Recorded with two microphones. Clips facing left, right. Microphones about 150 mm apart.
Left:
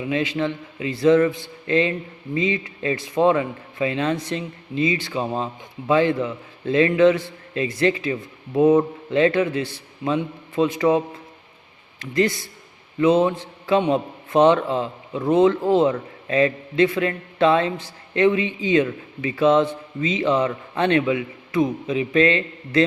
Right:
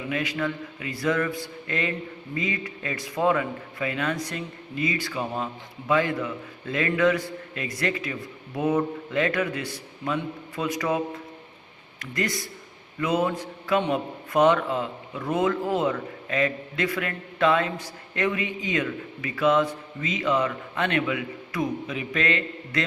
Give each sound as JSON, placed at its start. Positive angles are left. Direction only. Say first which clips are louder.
{"t": 0.1, "sound": "a man's voice", "louder": "left 5 dB", "side_deg": 25}
{"t": 13.0, "sound": "mantra", "louder": "left 7 dB", "side_deg": 25}
{"t": 13.9, "sound": "a man's voice", "louder": "left 5 dB", "side_deg": 30}